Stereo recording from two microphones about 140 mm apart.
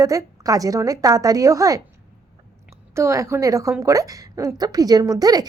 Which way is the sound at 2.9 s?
20° right (ahead or behind).